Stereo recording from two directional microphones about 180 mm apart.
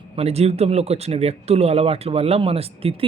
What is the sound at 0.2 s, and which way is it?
Speech, 35° right (ahead or behind).